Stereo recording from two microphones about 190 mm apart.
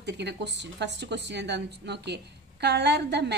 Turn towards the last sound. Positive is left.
turn(degrees=-60)  # may be behind; listen again after turning